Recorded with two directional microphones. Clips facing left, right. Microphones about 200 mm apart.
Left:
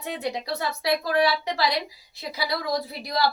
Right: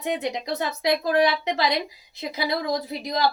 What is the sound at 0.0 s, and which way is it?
A woman's voice, 20° right (ahead or behind).